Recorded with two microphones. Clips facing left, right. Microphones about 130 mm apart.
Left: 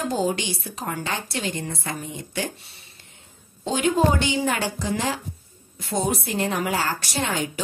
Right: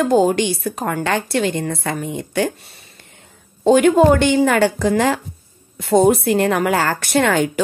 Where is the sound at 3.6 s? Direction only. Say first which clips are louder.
Right 10 dB; 55° right (ahead or behind).